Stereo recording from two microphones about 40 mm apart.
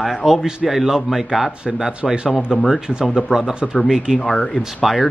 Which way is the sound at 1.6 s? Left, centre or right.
Right.